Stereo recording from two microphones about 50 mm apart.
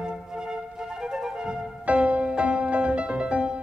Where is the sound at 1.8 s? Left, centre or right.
Right.